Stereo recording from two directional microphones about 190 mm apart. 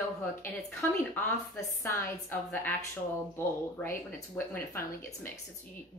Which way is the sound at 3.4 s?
10° left (ahead or behind).